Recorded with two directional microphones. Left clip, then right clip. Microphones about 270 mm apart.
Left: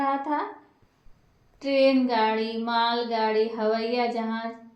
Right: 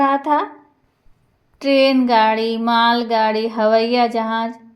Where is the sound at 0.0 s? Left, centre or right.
Right.